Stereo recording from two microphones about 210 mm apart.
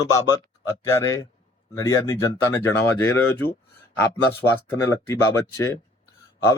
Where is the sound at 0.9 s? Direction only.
15° left (ahead or behind).